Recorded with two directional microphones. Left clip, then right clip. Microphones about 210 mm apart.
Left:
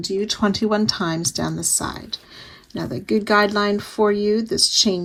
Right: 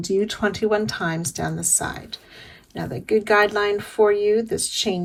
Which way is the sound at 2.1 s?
25° left (ahead or behind).